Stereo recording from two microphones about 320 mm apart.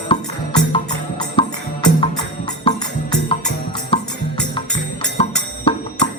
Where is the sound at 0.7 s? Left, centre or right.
Centre.